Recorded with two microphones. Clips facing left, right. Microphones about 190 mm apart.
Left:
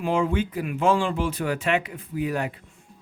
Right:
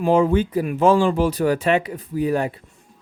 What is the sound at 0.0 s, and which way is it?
Speech, 40° right (ahead or behind).